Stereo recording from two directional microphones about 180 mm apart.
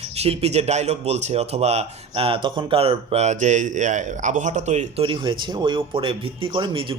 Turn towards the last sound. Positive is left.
turn(degrees=-30)  # may be behind; listen again after turning